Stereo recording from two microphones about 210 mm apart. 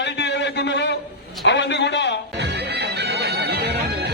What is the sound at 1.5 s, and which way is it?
Speech, 55° left (ahead or behind).